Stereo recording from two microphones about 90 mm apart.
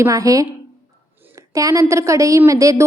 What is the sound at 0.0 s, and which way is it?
Speech, 40° right (ahead or behind).